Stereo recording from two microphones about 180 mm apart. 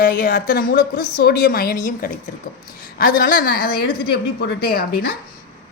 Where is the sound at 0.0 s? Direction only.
55° left (ahead or behind).